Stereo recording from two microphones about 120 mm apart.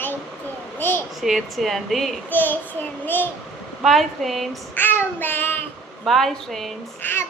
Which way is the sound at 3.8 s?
Centre (ahead or behind).